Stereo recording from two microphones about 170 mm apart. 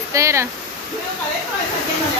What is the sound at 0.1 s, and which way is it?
Speech, 15° right (ahead or behind).